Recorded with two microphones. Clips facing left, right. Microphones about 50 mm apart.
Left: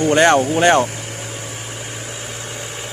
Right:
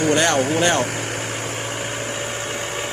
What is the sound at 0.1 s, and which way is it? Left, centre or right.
Speech, left.